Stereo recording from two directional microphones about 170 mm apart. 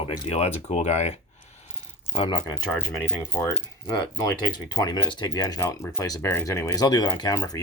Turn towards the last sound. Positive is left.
turn(degrees=20)  # may be behind; listen again after turning